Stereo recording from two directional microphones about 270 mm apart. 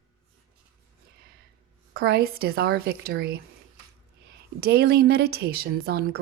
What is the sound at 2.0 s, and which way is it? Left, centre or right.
Speech, right.